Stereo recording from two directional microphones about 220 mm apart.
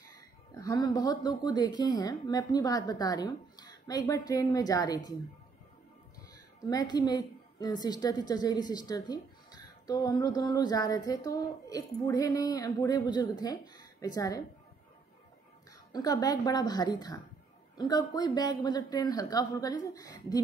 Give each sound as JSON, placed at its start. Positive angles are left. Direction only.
{"t": 0.1, "sound": "speech", "side_deg": 15}
{"t": 6.7, "sound": "a woman's voice", "side_deg": 15}
{"t": 15.9, "sound": "speech", "side_deg": 15}